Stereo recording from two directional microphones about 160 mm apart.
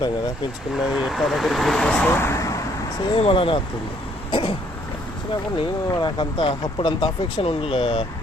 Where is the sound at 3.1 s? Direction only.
30° left (ahead or behind).